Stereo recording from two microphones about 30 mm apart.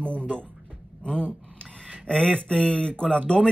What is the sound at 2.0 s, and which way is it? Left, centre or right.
Speech, left.